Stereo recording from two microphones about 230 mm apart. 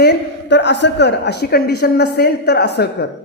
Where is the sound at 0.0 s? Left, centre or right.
Left.